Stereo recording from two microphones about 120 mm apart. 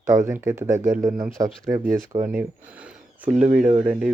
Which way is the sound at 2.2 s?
10° right (ahead or behind).